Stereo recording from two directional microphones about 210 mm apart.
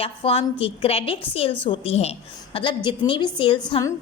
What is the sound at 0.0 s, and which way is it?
A woman's voice, 25° left (ahead or behind).